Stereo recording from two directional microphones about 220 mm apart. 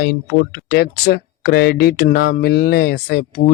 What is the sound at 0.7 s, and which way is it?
Speech, 45° left (ahead or behind).